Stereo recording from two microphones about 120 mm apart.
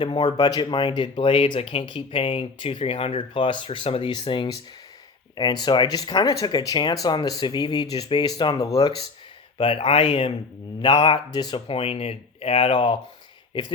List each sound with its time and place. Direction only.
0.0 s speech: 40° left (ahead or behind)
9.6 s speech: 50° left (ahead or behind)
10.8 s speech: 40° left (ahead or behind)
11.7 s speech: 55° left (ahead or behind)